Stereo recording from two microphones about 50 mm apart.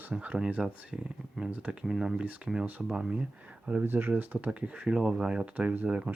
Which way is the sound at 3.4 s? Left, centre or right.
Right.